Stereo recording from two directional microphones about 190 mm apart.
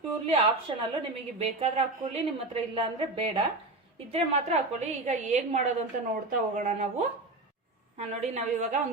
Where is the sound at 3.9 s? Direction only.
30° right (ahead or behind).